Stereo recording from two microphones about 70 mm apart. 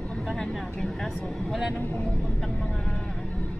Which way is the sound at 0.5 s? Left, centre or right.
Centre.